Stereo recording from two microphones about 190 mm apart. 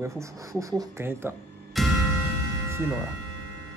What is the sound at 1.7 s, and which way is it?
Music, centre (ahead or behind).